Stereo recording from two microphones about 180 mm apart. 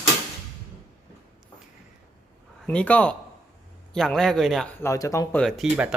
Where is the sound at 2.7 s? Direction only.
5° left (ahead or behind).